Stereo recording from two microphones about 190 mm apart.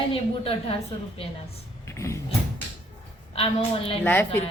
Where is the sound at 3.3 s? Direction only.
30° left (ahead or behind).